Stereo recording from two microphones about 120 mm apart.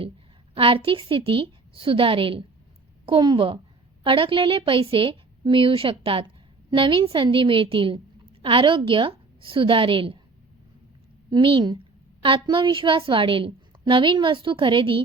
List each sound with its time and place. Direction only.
0.5 s a woman's voice: 50° right (ahead or behind)
11.3 s a woman's voice: 45° right (ahead or behind)